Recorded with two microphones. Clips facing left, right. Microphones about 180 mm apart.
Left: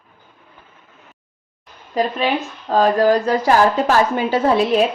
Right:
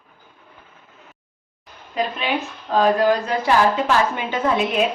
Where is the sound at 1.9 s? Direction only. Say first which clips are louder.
Left 4 dB; 35° left (ahead or behind).